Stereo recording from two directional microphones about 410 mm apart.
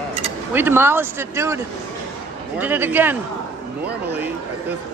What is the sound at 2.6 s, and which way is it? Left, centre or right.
Speech, centre.